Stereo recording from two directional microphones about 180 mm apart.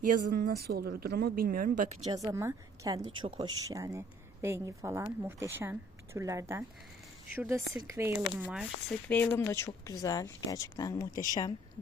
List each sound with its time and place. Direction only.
0.0 s speech: 45° right (ahead or behind)
2.0 s a woman's voice: 20° right (ahead or behind)
3.7 s speech: 20° right (ahead or behind)
8.2 s speech: 5° right (ahead or behind)
9.0 s speech: 10° left (ahead or behind)